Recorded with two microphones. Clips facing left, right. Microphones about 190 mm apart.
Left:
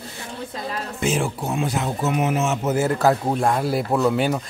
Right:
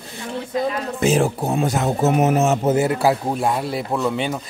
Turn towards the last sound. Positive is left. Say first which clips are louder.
# left 2 dB
turn(degrees=0)  # may be behind; listen again after turning